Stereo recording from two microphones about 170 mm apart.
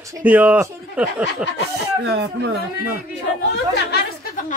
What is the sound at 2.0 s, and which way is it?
Speech, 80° right.